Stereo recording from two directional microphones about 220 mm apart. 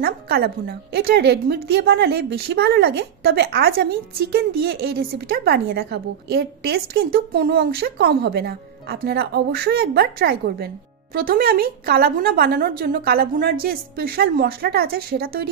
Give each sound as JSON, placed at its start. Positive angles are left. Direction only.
{"t": 0.0, "sound": "a woman's voice", "side_deg": -45}